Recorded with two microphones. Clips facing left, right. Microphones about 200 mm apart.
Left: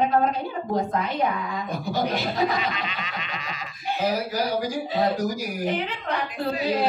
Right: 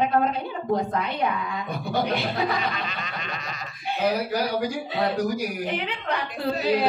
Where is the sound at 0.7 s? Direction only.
60° right (ahead or behind).